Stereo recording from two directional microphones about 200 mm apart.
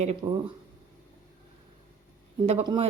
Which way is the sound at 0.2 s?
20° right (ahead or behind).